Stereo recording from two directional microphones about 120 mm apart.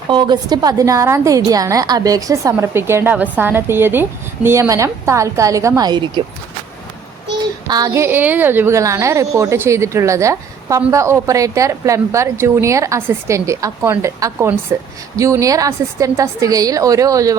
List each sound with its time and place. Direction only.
0.1 s a woman's voice: 40° right (ahead or behind)
7.7 s a woman's voice: 30° right (ahead or behind)